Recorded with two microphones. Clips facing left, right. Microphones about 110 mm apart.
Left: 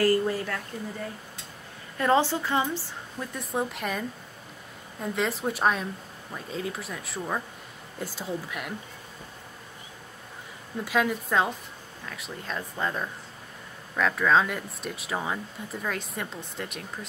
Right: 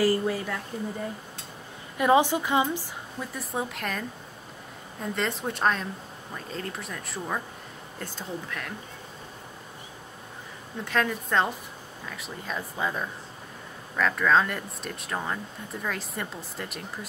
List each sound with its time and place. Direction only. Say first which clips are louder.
0.0 s a woman's voice: left 1 dB; 10° right (ahead or behind)
2.0 s a woman's voice: right 2 dB; 15° right (ahead or behind)
3.2 s speech: left 2 dB; centre (ahead or behind)
5.0 s speech: left 2 dB; centre (ahead or behind)
10.9 s speech: left 1 dB; 5° left (ahead or behind)